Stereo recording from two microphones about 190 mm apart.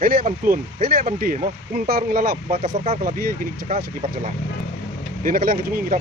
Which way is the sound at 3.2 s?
50° right (ahead or behind).